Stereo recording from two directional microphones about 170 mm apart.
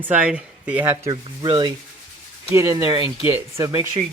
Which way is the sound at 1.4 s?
25° right (ahead or behind).